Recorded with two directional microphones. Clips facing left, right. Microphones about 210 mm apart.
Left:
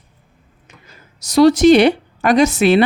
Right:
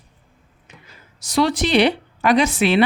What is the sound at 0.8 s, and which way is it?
A woman's voice, 40° left (ahead or behind).